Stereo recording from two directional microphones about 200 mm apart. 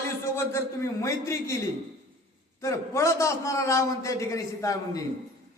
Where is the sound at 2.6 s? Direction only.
15° left (ahead or behind).